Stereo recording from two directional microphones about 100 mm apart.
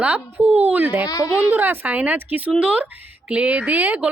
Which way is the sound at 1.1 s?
35° left (ahead or behind).